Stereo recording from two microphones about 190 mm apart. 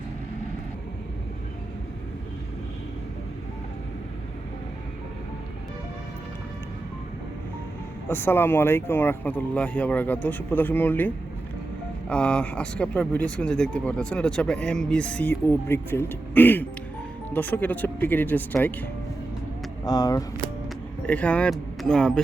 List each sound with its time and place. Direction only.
8.1 s speech: 10° left (ahead or behind)
21.1 s speech: 5° left (ahead or behind)